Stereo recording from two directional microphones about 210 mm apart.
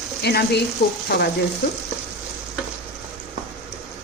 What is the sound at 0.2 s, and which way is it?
Speech, 50° left (ahead or behind).